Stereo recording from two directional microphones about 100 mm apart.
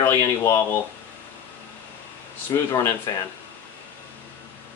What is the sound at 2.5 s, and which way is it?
Speech, 30° left (ahead or behind).